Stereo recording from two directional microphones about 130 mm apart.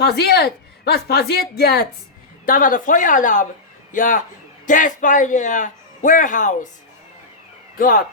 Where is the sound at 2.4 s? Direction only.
90° left; by 6.6 s 75° left (ahead or behind).